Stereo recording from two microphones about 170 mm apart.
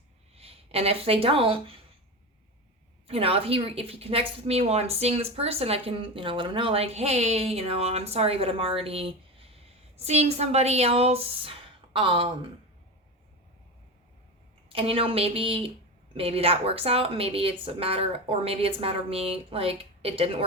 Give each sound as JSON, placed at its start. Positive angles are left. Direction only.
{"t": 0.3, "sound": "speech", "side_deg": -35}
{"t": 3.1, "sound": "a woman's voice", "side_deg": -35}
{"t": 14.7, "sound": "a woman's voice", "side_deg": -30}